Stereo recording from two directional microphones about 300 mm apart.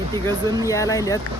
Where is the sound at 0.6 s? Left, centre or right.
Centre.